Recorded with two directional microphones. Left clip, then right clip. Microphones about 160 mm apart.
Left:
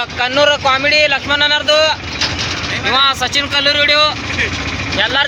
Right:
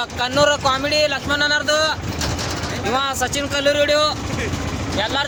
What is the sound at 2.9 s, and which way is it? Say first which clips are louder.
Speech: left 8 dB; 5° right (ahead or behind).